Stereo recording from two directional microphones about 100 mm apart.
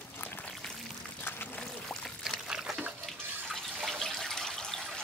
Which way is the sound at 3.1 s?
5° left (ahead or behind).